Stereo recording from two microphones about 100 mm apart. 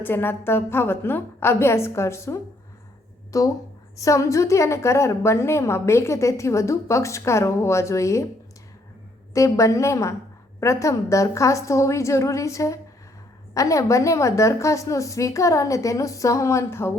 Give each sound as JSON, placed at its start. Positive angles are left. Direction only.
{"t": 0.0, "sound": "a woman's voice", "side_deg": 20}
{"t": 9.3, "sound": "a woman's voice", "side_deg": 30}